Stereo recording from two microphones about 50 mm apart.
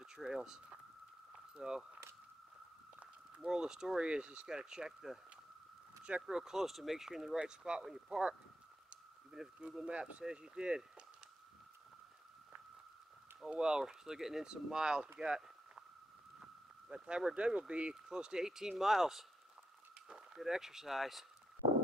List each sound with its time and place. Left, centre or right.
0.0 s a sound: centre
1.3 s boiling: centre
3.3 s speech: centre
6.2 s speech: centre
13.5 s speech: centre
15.1 s a sound: centre
16.9 s speech: centre